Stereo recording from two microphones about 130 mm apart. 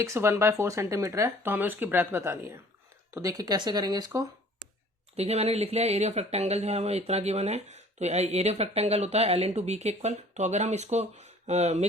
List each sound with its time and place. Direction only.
0.0 s speech: 20° right (ahead or behind)
4.6 s a sound: centre (ahead or behind)
5.1 s speech: 55° right (ahead or behind)